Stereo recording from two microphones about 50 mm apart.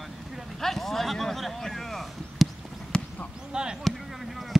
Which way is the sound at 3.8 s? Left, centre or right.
Centre.